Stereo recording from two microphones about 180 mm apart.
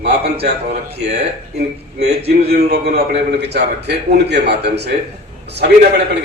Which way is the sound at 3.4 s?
70° right (ahead or behind).